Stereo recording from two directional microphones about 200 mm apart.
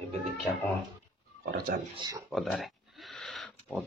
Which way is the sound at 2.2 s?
Centre (ahead or behind).